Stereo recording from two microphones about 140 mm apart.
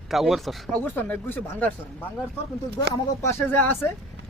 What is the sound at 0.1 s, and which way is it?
Speech, centre (ahead or behind).